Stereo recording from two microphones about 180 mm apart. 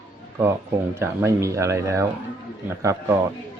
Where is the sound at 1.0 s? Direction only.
15° right (ahead or behind).